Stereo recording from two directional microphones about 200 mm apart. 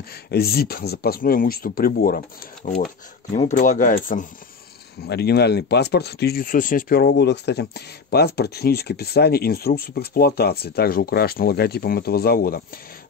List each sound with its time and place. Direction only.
0.1 s speech: 50° left (ahead or behind)
5.0 s speech: 55° left (ahead or behind)